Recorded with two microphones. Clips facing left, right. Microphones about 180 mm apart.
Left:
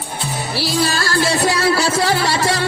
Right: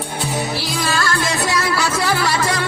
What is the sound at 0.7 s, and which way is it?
Music, 35° left (ahead or behind).